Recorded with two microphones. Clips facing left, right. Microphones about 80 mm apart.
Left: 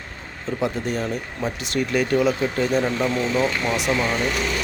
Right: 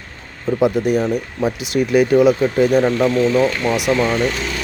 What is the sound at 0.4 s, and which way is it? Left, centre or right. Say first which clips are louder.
Speech: right 8 dB; centre.